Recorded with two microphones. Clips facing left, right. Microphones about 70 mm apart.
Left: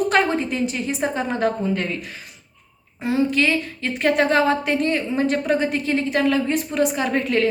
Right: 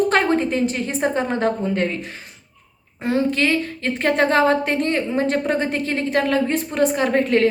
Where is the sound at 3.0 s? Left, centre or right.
Right.